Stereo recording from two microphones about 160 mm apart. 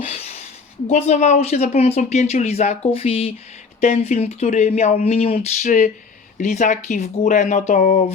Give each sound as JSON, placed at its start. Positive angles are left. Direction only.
{"t": 0.9, "sound": "speech", "side_deg": 45}